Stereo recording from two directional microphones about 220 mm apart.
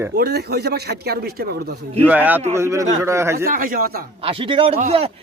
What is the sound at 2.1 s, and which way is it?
A man's voice, 10° right (ahead or behind).